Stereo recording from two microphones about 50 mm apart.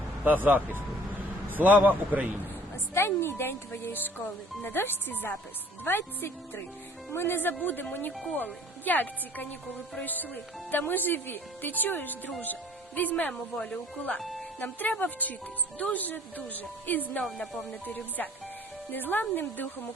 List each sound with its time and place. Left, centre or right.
0.3 s a man's voice: right
2.9 s speech: left
14.2 s speech: centre
14.6 s speech: left